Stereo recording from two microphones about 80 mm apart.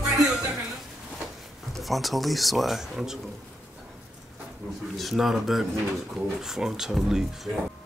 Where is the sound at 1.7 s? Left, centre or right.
Centre.